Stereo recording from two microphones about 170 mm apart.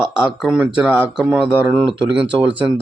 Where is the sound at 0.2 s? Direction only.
5° right (ahead or behind).